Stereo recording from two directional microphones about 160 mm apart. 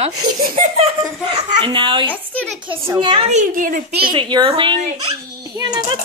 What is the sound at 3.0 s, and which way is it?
Speech, 30° right (ahead or behind).